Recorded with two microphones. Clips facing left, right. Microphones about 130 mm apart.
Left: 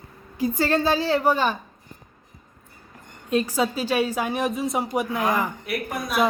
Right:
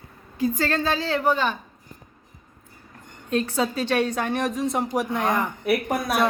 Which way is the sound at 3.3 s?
10° left (ahead or behind).